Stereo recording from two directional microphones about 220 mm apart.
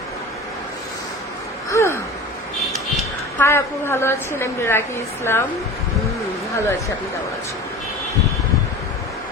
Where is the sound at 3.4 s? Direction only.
10° left (ahead or behind).